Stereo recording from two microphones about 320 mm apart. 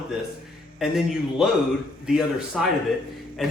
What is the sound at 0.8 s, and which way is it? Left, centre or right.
A man's voice, centre.